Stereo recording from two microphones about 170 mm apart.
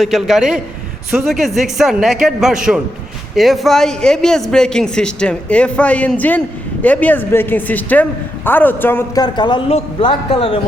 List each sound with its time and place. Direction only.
0.0 s speech: centre (ahead or behind)
9.2 s a man's voice: 25° left (ahead or behind)